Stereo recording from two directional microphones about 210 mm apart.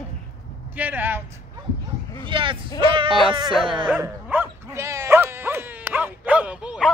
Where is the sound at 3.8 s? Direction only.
10° right (ahead or behind).